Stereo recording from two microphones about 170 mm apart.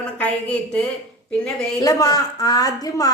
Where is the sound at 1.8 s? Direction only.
20° left (ahead or behind).